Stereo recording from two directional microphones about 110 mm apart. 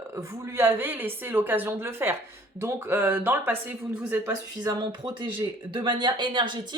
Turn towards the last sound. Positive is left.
turn(degrees=-45)  # may be behind; listen again after turning